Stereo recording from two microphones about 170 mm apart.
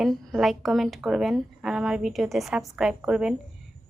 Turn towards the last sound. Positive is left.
turn(degrees=-5)  # may be behind; listen again after turning